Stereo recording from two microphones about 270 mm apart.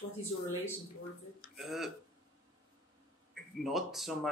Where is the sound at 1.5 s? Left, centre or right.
Centre.